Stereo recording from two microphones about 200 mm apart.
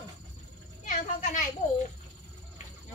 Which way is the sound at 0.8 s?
35° left (ahead or behind).